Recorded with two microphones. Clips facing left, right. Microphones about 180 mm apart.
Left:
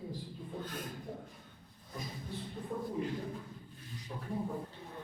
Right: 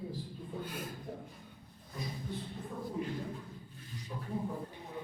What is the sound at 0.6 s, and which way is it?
Speech, 10° right (ahead or behind).